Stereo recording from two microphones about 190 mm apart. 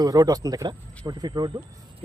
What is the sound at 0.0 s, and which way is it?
Speech, 20° right (ahead or behind).